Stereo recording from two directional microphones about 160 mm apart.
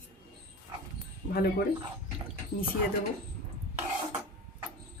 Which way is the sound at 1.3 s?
75° left (ahead or behind).